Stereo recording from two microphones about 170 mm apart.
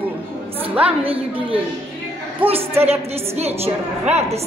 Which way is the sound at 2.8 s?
35° right (ahead or behind).